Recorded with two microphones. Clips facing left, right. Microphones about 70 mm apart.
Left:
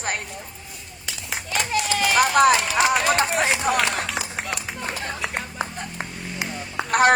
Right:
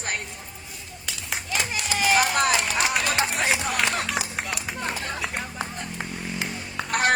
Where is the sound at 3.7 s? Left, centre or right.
Left.